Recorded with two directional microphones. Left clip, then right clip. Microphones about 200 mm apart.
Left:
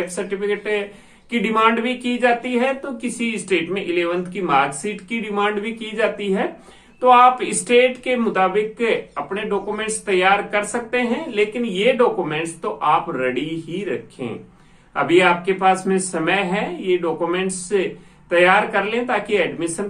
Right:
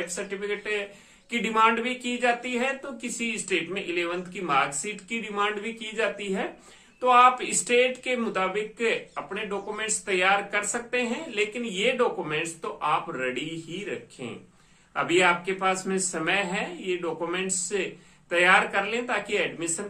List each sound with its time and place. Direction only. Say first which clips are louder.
0.1 s speech: left 8 dB; 5° right (ahead or behind)